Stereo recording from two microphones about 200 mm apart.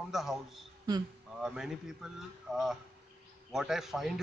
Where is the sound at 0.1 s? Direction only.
Centre (ahead or behind).